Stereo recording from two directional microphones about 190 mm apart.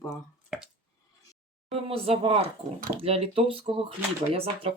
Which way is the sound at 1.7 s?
30° right (ahead or behind).